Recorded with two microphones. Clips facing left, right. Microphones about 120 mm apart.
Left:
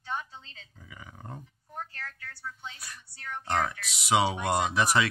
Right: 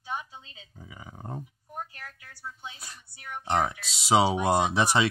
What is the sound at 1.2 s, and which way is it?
Dog, 25° right (ahead or behind).